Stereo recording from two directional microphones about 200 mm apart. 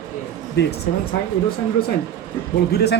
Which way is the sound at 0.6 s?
55° left (ahead or behind).